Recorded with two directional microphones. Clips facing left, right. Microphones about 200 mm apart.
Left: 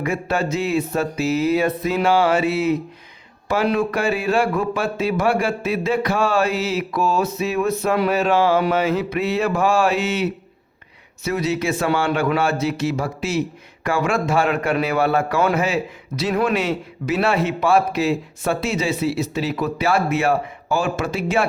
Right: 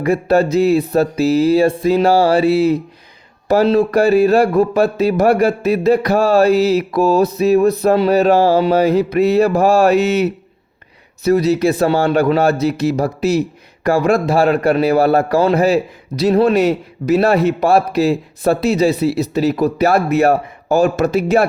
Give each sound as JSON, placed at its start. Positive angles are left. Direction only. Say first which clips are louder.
{"t": 0.0, "sound": "a man's voice", "louder": "right 8 dB", "side_deg": -35}